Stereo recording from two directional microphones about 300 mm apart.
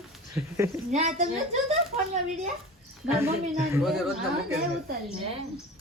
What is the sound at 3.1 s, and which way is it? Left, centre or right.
Speech, centre.